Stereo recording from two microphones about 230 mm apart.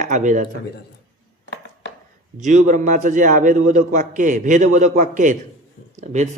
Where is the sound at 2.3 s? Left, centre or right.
Right.